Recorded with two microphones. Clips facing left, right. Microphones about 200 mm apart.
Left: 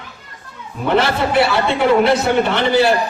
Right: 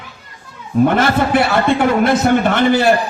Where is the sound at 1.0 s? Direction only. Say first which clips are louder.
Right 1 dB; 50° right (ahead or behind).